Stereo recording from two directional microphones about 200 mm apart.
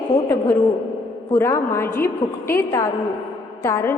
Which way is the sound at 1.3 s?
15° left (ahead or behind).